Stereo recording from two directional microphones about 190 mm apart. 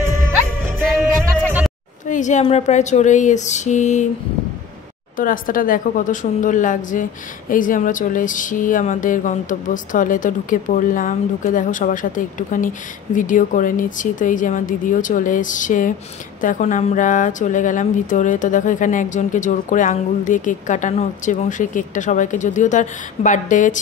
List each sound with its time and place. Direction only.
1.2 s music: 10° right (ahead or behind)
2.0 s a woman's voice: 40° left (ahead or behind)
5.1 s a woman's voice: 45° left (ahead or behind)